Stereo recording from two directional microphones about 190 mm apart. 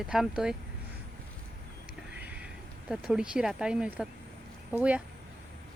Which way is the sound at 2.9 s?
5° right (ahead or behind).